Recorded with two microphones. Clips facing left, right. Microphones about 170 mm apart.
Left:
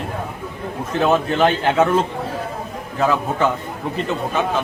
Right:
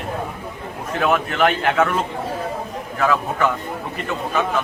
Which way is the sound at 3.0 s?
25° left (ahead or behind).